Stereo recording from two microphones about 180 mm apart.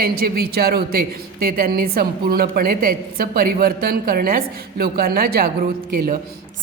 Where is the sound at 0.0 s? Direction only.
55° right (ahead or behind).